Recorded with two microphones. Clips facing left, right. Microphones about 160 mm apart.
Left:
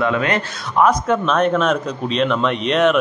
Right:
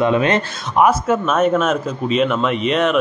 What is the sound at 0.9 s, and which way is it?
Speech, 5° right (ahead or behind).